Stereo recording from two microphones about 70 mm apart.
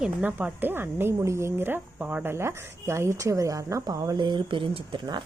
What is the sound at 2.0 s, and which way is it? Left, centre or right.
Speech, right.